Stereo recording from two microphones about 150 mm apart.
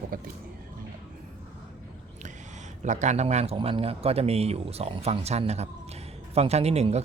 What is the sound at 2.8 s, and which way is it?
A man's voice, 50° right (ahead or behind).